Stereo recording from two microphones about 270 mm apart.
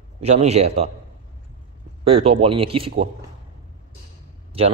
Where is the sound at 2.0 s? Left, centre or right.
Right.